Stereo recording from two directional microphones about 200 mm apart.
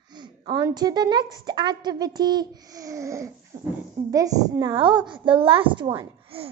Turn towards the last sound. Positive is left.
turn(degrees=-25)  # may be behind; listen again after turning